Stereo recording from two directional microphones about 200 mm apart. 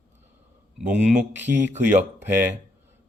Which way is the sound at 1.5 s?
45° right (ahead or behind).